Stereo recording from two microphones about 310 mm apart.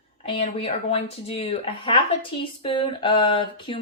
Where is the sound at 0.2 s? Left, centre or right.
Centre.